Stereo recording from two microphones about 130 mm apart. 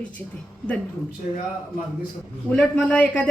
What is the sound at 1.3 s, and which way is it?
Speech, 65° left (ahead or behind).